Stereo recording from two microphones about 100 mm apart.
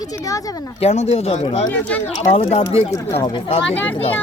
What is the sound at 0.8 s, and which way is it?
Speech, 90° left.